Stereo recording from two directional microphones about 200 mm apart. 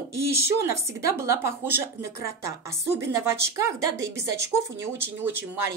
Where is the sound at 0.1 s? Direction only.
15° right (ahead or behind).